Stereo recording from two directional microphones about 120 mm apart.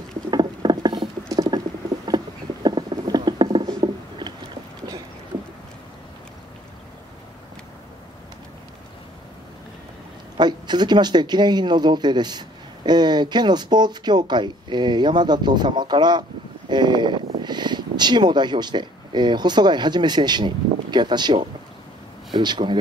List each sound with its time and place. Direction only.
0.3 s rodents: 35° right (ahead or behind)
10.3 s speech: 40° right (ahead or behind)